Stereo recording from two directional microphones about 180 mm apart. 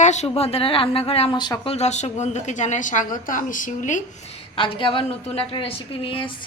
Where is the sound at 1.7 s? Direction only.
40° left (ahead or behind).